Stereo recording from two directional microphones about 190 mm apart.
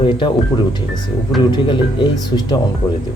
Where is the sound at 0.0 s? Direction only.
25° left (ahead or behind).